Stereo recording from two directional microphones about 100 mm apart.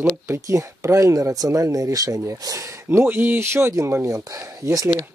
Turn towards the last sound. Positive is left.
turn(degrees=-35)  # may be behind; listen again after turning